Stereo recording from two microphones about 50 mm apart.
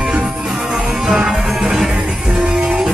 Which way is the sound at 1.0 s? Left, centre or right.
Centre.